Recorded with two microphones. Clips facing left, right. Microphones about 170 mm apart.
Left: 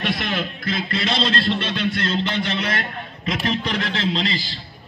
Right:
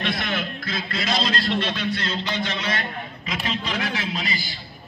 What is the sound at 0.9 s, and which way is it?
Speech, 25° left (ahead or behind).